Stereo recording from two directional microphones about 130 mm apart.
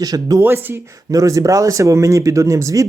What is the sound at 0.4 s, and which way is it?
Speech, 15° right (ahead or behind).